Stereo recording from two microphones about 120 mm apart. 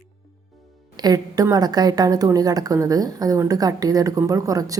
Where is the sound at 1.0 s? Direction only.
35° right (ahead or behind).